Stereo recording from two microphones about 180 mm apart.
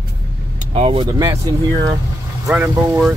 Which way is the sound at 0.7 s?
35° right (ahead or behind).